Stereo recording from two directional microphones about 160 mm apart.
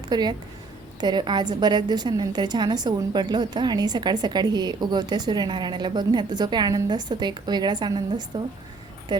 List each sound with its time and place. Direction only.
0.1 s a woman's voice: 25° right (ahead or behind)